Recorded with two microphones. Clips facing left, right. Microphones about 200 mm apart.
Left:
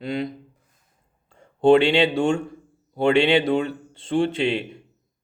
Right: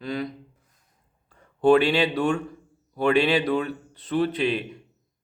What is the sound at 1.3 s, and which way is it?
Speech, 25° left (ahead or behind).